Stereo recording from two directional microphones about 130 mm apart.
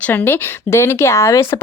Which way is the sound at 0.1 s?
20° left (ahead or behind).